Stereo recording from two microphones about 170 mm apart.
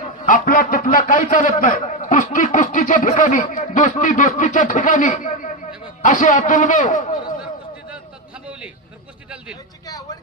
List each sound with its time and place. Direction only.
0.2 s speech: 50° left (ahead or behind)